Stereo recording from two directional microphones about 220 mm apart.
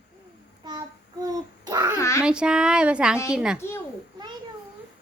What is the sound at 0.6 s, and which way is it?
Child singing, 20° right (ahead or behind).